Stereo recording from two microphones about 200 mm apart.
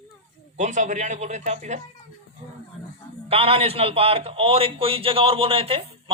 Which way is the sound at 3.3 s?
30° right (ahead or behind).